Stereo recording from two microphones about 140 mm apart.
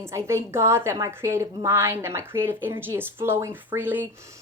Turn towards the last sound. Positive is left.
turn(degrees=-15)  # may be behind; listen again after turning